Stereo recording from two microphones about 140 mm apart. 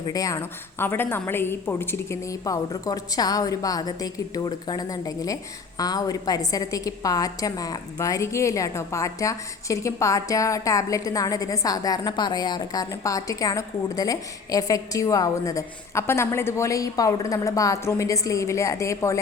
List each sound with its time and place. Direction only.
0.0 s a woman's voice: 25° left (ahead or behind)